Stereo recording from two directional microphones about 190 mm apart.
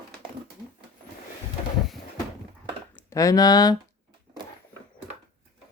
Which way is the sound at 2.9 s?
15° left (ahead or behind).